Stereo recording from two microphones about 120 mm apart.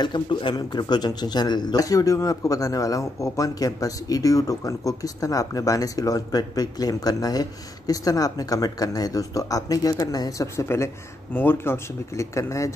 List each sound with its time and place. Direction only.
0.0 s a man's voice: 40° left (ahead or behind)